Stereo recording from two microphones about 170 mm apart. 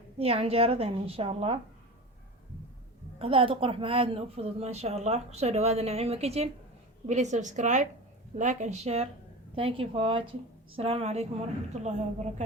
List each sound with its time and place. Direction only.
0.2 s a woman's voice: 35° right (ahead or behind)
3.2 s a woman's voice: 35° right (ahead or behind)